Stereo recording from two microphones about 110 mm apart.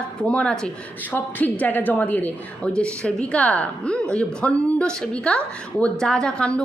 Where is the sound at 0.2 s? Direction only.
10° left (ahead or behind).